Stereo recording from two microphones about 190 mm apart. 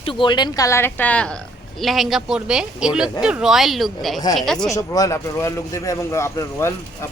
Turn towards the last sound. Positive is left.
turn(degrees=15)  # may be behind; listen again after turning